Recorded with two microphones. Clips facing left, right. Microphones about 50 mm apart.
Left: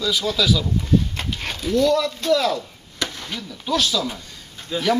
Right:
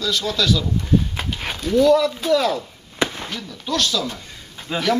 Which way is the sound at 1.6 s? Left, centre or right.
Centre.